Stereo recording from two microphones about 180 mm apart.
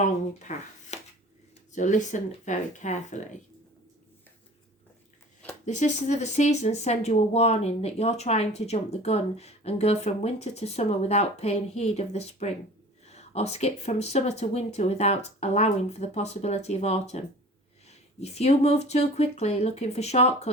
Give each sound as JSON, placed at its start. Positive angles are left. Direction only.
{"t": 0.0, "sound": "speech", "side_deg": 40}
{"t": 5.6, "sound": "speech", "side_deg": 40}